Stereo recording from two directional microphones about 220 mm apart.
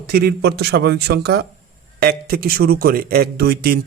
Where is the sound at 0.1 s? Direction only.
45° right (ahead or behind).